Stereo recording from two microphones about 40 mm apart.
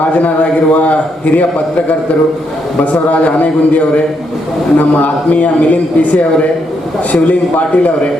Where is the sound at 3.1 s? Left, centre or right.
Left.